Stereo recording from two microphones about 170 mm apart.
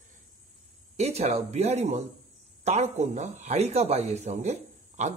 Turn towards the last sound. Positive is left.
turn(degrees=-40)  # may be behind; listen again after turning